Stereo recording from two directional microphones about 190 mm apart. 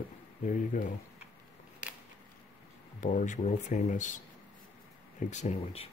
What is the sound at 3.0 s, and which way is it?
Speech, 40° left (ahead or behind).